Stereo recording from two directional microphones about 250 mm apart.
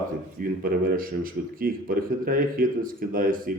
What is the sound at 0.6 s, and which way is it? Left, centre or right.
A man's voice, right.